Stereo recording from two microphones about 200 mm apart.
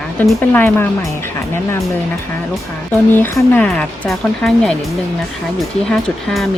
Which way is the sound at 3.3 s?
5° left (ahead or behind).